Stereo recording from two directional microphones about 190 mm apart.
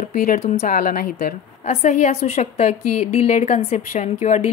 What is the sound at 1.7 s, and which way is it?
A woman's voice, 35° left (ahead or behind).